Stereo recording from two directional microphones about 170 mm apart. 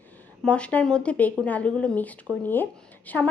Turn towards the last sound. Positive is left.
turn(degrees=10)  # may be behind; listen again after turning